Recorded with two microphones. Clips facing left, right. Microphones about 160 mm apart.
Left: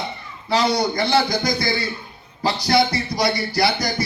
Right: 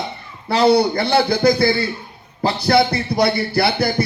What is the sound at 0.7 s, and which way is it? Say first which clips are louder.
Speech: right 4 dB; 60° right (ahead or behind).